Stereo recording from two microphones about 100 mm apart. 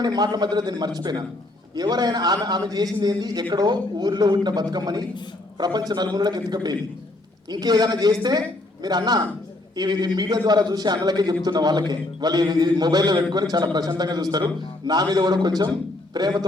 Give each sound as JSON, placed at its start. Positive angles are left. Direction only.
{"t": 0.0, "sound": "a man's voice", "side_deg": -45}